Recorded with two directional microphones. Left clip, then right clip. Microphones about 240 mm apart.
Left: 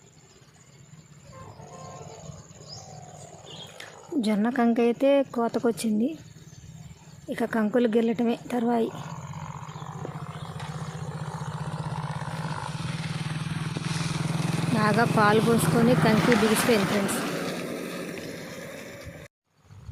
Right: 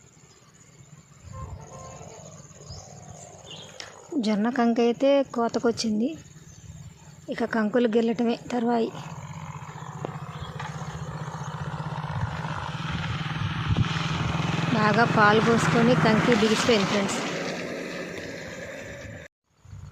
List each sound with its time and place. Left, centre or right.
3.8 s speech: centre
7.3 s speech: centre
12.3 s vehicle: right
14.8 s speech: centre
15.4 s speech: centre
15.9 s speech: centre
16.1 s speech: left
16.7 s a sound: left